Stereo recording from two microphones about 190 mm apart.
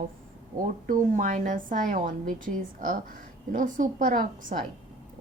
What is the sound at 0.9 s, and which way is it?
A woman's voice, 40° right (ahead or behind).